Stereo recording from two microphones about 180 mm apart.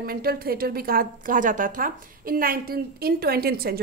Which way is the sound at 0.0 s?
55° right (ahead or behind).